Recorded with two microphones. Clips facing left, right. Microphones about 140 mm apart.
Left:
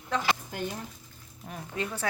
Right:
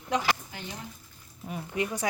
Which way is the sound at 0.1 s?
15° right (ahead or behind).